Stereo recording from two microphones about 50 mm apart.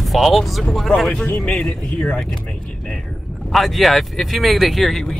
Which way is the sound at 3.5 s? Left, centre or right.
Centre.